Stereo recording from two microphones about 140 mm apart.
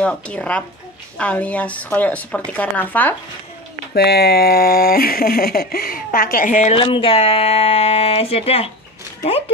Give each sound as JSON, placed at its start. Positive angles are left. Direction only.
{"t": 0.0, "sound": "speech", "side_deg": 5}
{"t": 4.4, "sound": "speech", "side_deg": 90}
{"t": 6.7, "sound": "speech", "side_deg": 40}